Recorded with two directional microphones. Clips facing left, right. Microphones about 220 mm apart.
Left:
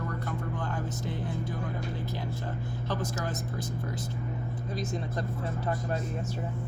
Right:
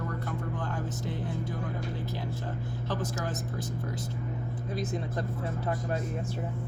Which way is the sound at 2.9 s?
5° right (ahead or behind).